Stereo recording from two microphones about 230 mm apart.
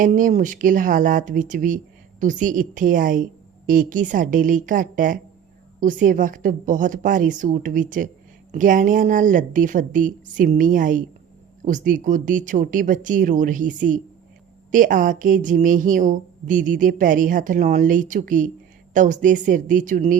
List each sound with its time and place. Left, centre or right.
0.0 s speech: right